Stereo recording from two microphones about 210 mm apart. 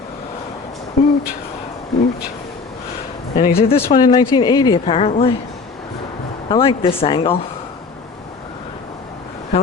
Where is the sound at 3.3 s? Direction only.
40° left (ahead or behind).